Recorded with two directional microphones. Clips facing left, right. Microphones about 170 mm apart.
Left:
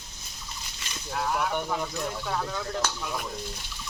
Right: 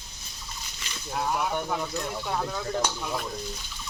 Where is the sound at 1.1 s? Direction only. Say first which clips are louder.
Even; 15° right (ahead or behind).